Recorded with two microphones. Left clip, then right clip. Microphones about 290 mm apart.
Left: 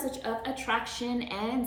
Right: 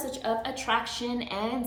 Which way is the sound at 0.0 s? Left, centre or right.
Centre.